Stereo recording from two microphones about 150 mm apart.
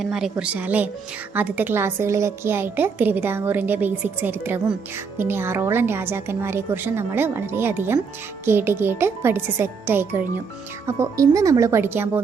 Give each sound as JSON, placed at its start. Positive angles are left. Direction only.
{"t": 0.0, "sound": "a woman's voice", "side_deg": -5}